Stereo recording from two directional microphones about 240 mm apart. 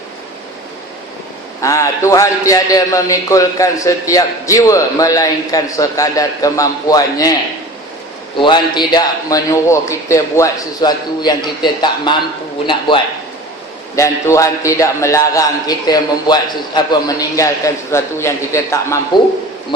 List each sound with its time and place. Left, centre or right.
1.6 s a man's voice: centre
8.4 s a man's voice: centre
13.9 s a man's voice: centre